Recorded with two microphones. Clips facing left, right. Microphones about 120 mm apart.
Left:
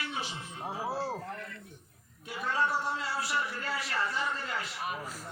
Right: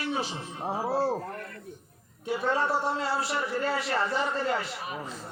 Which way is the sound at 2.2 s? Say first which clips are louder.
Right 5 dB; 30° right (ahead or behind).